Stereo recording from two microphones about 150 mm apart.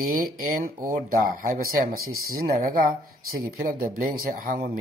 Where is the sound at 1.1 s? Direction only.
65° right (ahead or behind).